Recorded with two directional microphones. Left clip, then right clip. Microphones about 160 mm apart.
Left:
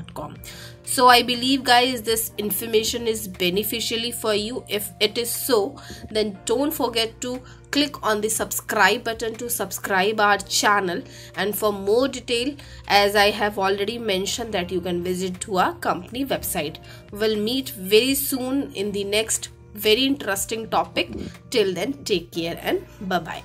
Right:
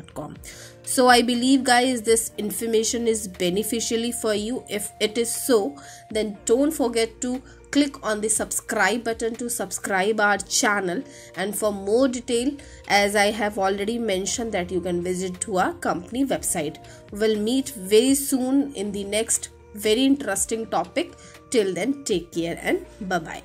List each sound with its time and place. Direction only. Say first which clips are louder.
0.9 s a woman's voice: left 2 dB; 60° right (ahead or behind)